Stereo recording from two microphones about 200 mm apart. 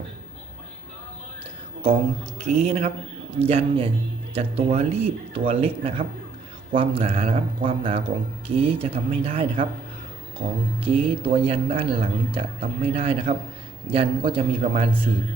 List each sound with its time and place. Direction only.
2.4 s speech: 35° right (ahead or behind)
10.8 s speech: 30° right (ahead or behind)